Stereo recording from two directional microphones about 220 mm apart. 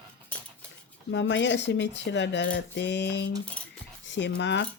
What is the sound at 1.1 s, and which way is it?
Speech, 55° left (ahead or behind).